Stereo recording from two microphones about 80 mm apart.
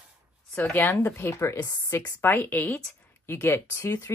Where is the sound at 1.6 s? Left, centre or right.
Left.